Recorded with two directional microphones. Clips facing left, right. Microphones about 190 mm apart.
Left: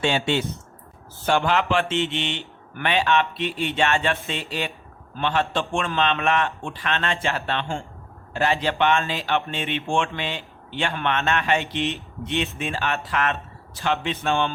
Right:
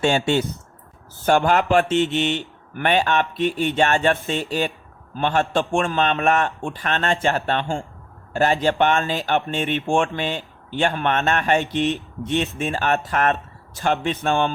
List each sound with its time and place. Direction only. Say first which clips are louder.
1.2 s speech: right 4 dB; 45° right (ahead or behind)